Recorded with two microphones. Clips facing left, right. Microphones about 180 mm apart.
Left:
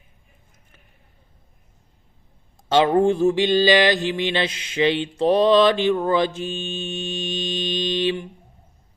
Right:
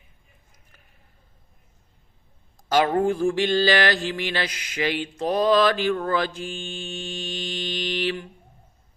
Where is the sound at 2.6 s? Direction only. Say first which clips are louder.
Left 4 dB; 25° left (ahead or behind).